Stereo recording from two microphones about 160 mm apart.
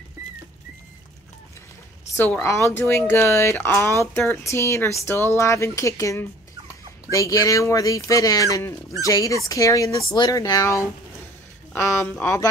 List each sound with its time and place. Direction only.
2.1 s speech: 15° left (ahead or behind)